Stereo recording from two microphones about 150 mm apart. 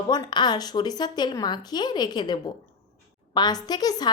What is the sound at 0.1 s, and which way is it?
A woman's voice, 30° left (ahead or behind).